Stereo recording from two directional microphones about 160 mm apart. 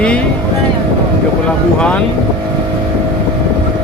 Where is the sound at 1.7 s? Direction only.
10° left (ahead or behind).